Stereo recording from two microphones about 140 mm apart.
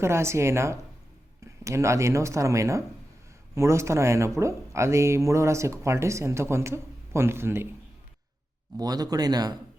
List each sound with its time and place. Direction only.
0.0 s speech: 20° right (ahead or behind)
8.8 s speech: 25° right (ahead or behind)